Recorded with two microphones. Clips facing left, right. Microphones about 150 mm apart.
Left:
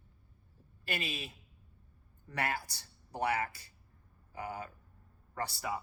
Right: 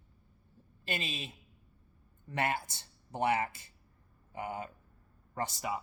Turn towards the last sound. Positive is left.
turn(degrees=-20)  # may be behind; listen again after turning